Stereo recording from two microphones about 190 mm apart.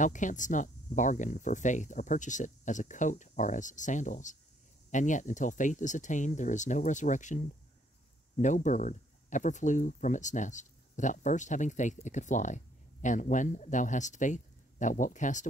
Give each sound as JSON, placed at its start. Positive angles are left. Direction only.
{"t": 0.0, "sound": "speech", "side_deg": 40}